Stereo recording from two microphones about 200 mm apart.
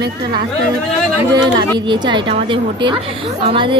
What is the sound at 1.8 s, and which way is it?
Speech, 20° right (ahead or behind).